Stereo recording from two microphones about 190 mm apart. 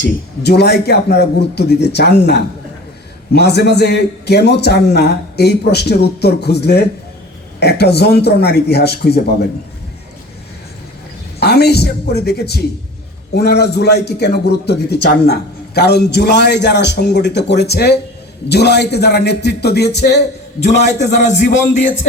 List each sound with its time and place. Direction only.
0.0 s a man's voice: 60° left (ahead or behind)
11.3 s a man's voice: 60° left (ahead or behind)
21.0 s a man's voice: 40° left (ahead or behind)